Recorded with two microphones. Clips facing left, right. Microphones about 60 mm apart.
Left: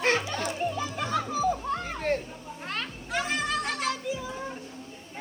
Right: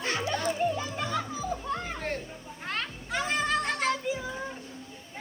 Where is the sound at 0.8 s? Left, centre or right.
Left.